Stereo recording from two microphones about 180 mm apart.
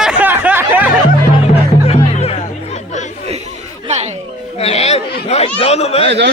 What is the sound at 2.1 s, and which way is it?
Music, 35° left (ahead or behind).